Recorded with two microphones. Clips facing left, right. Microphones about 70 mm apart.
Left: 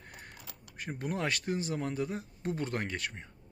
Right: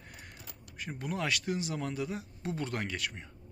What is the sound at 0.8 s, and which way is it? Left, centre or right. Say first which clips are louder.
Speech: left 1 dB; left.